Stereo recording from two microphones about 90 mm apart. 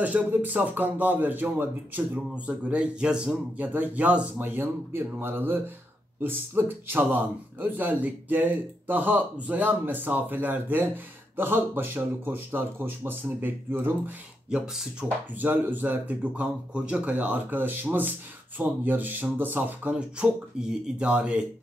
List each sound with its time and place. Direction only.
0.0 s speech: 20° right (ahead or behind)